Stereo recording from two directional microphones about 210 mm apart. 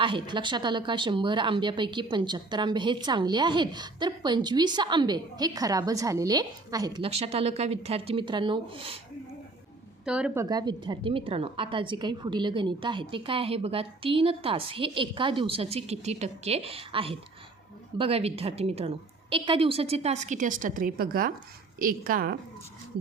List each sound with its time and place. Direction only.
0.0 s speech: 25° right (ahead or behind)
10.1 s speech: 5° right (ahead or behind)
10.4 s a woman's voice: 20° right (ahead or behind); by 22.4 s 45° right (ahead or behind)